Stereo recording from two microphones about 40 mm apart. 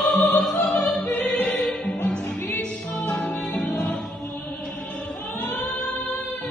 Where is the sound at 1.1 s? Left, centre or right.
Left.